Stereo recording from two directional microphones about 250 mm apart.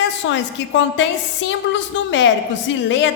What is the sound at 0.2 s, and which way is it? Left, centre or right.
A man's voice, left.